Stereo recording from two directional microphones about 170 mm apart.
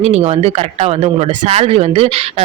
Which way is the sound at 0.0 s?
35° right (ahead or behind).